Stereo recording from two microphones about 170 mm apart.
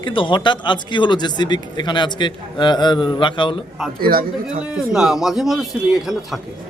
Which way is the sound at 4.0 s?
60° right (ahead or behind).